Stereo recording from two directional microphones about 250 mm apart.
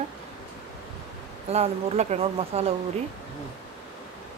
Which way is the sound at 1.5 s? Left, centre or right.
Right.